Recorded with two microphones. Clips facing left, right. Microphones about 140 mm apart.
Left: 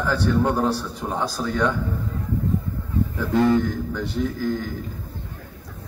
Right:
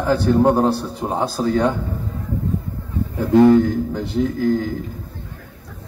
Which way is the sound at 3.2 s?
45° right (ahead or behind).